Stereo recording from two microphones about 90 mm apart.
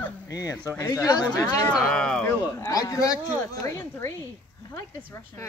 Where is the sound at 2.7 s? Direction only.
45° left (ahead or behind).